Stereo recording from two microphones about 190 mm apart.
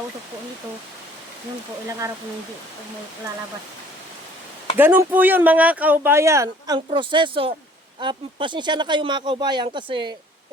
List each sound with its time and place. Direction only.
1.9 s speech: 15° right (ahead or behind)
4.8 s speech: 10° right (ahead or behind); by 10.2 s 25° right (ahead or behind)